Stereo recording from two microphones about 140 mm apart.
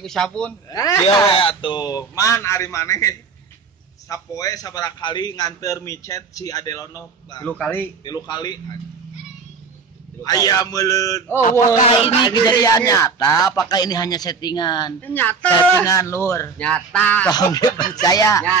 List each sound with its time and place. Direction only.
0.0 s a man's voice: 5° left (ahead or behind)
0.7 s a man's voice: 25° left (ahead or behind)
1.1 s a man's voice: 40° left (ahead or behind)
7.4 s speech: 10° left (ahead or behind)
8.0 s a man's voice: 30° left (ahead or behind)
10.2 s a man's voice: 25° left (ahead or behind)
15.0 s a man's voice: 15° left (ahead or behind)
16.6 s speech: 10° left (ahead or behind)
17.3 s a man's voice: 30° left (ahead or behind)